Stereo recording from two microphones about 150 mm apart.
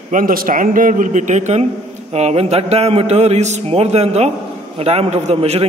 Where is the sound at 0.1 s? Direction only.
70° right (ahead or behind).